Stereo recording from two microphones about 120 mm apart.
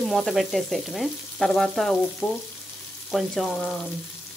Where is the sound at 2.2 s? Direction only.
15° left (ahead or behind).